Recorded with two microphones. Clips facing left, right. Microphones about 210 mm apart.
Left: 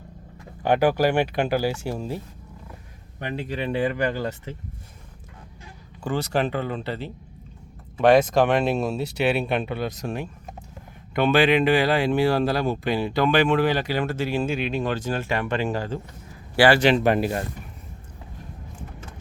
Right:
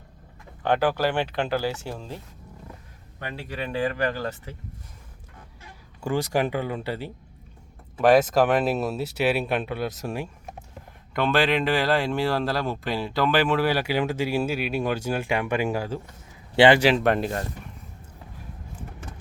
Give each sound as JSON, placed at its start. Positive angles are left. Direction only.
{"t": 0.6, "sound": "speech", "side_deg": 10}
{"t": 6.0, "sound": "speech", "side_deg": -15}
{"t": 16.6, "sound": "speech", "side_deg": -20}
{"t": 16.8, "sound": "speech", "side_deg": 0}